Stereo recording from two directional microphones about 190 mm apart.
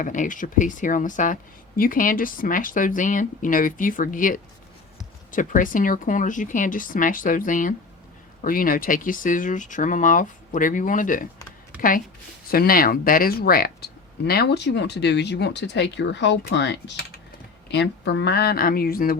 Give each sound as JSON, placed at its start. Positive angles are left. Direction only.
{"t": 0.0, "sound": "speech", "side_deg": 45}